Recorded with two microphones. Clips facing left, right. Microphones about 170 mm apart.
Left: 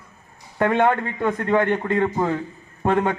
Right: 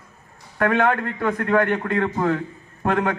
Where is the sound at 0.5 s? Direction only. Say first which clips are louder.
Left 1 dB; 20° left (ahead or behind).